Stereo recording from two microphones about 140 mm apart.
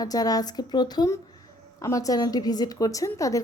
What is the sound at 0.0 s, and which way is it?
A woman's voice, 25° left (ahead or behind).